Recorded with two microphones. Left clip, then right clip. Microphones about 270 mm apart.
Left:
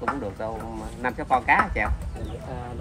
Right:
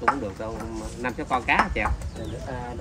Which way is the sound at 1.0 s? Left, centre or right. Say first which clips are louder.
Left 3 dB; centre.